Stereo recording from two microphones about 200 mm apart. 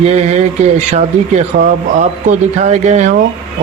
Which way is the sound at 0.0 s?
35° right (ahead or behind).